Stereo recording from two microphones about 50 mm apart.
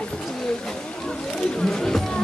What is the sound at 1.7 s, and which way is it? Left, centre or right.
Speech, centre.